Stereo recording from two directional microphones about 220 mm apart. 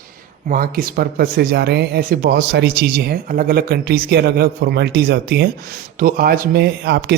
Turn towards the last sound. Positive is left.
turn(degrees=-50)  # may be behind; listen again after turning